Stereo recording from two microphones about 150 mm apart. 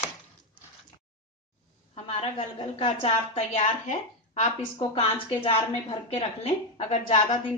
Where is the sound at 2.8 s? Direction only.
45° left (ahead or behind).